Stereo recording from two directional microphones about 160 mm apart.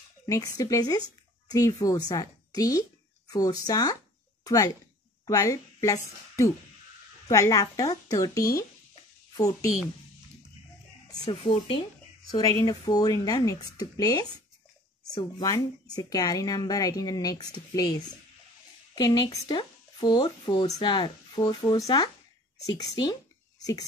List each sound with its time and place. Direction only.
0.6 s a woman's voice: 20° left (ahead or behind)
11.2 s speech: 35° left (ahead or behind)
12.3 s a woman's voice: 20° left (ahead or behind)